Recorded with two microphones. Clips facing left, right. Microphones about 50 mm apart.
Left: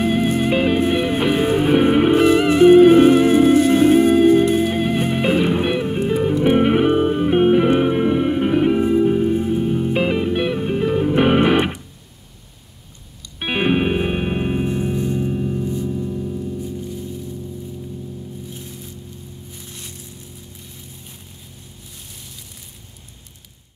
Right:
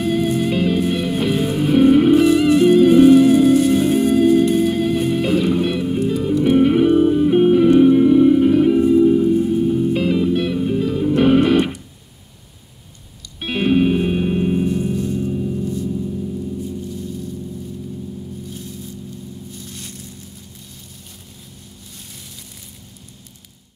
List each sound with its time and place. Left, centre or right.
0.0 s music: left
13.4 s music: left
18.5 s music: left
19.5 s a sound: left